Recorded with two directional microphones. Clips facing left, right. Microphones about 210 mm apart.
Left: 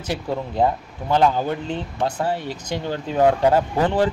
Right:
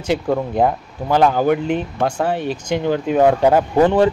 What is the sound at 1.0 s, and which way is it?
Speech, 35° right (ahead or behind).